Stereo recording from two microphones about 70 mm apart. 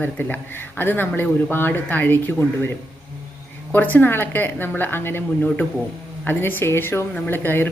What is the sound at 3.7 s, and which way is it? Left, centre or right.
A woman's voice, left.